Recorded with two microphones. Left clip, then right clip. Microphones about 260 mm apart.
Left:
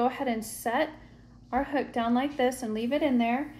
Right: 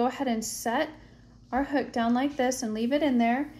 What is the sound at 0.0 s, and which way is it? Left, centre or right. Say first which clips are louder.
Speech: even; right.